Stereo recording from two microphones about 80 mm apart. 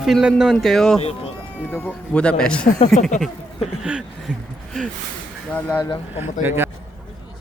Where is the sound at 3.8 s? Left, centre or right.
Centre.